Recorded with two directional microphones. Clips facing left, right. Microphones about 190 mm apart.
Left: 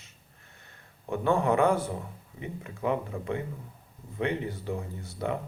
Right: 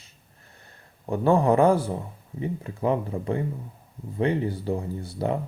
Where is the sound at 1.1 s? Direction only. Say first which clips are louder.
Right 5 dB; 35° right (ahead or behind).